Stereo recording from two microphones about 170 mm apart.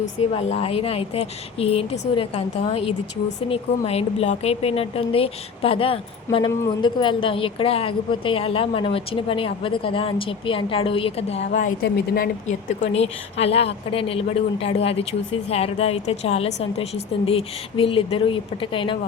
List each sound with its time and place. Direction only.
0.3 s a woman's voice: 40° left (ahead or behind)
11.8 s speech: 60° left (ahead or behind)
12.9 s a woman's voice: 35° left (ahead or behind)